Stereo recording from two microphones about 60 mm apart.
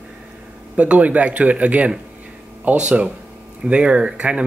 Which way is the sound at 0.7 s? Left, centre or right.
Right.